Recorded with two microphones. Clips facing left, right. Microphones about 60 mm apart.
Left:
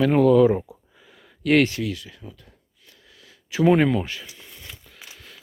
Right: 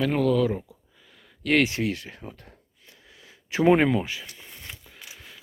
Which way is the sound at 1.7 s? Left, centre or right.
Right.